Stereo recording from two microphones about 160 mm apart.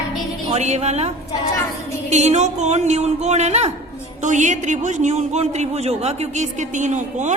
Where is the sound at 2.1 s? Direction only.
45° right (ahead or behind).